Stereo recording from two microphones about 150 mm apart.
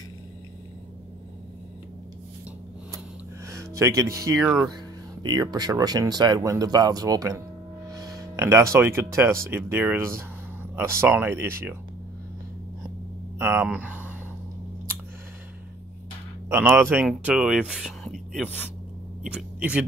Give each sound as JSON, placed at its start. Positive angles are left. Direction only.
{"t": 3.4, "sound": "music", "side_deg": -20}
{"t": 4.4, "sound": "speech", "side_deg": -5}
{"t": 5.2, "sound": "speech", "side_deg": -30}
{"t": 7.9, "sound": "a sound", "side_deg": -25}
{"t": 8.7, "sound": "speech", "side_deg": -15}
{"t": 13.4, "sound": "speech", "side_deg": -15}
{"t": 16.5, "sound": "speech", "side_deg": -15}
{"t": 18.3, "sound": "speech", "side_deg": 10}
{"t": 19.2, "sound": "speech", "side_deg": -10}